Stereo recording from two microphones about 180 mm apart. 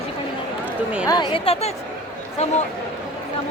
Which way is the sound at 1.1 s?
25° left (ahead or behind).